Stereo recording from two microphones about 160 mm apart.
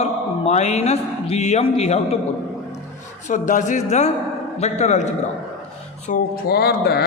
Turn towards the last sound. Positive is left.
turn(degrees=80)